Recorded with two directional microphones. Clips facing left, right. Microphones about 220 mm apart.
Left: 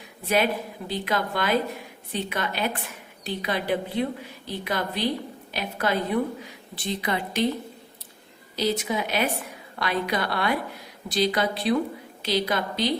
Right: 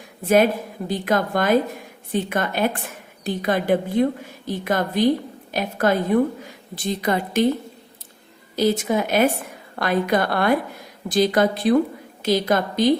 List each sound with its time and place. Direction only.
0.3 s a woman's voice: 45° right (ahead or behind)
8.5 s a woman's voice: 50° right (ahead or behind)